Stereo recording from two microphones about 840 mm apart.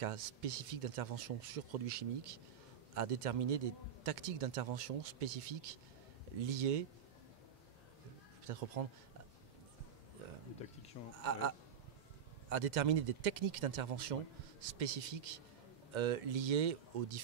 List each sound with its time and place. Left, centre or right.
0.0 s a man's voice: right
8.5 s a man's voice: right
11.1 s a man's voice: right